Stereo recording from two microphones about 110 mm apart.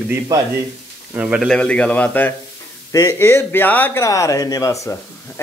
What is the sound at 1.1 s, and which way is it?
Speech, 10° right (ahead or behind).